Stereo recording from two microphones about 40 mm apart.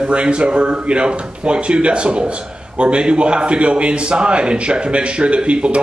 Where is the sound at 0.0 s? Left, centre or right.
Right.